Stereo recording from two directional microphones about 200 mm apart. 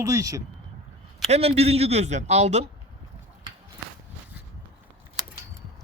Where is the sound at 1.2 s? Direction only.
30° right (ahead or behind).